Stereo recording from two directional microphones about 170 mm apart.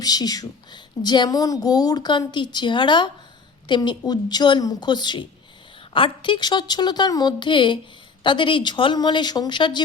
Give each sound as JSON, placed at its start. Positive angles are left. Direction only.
{"t": 0.0, "sound": "a woman's voice", "side_deg": 20}